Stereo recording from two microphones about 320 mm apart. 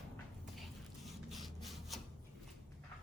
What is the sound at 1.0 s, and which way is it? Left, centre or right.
Rub, centre.